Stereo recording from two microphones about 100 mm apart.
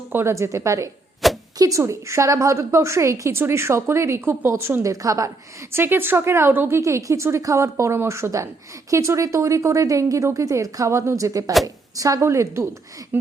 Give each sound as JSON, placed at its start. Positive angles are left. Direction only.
{"t": 0.1, "sound": "a woman's voice", "side_deg": -25}
{"t": 1.2, "sound": "a sound", "side_deg": 0}
{"t": 1.5, "sound": "a woman's voice", "side_deg": -35}
{"t": 5.7, "sound": "a woman's voice", "side_deg": -20}